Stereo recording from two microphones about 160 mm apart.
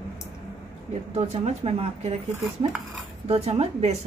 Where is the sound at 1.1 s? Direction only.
40° right (ahead or behind).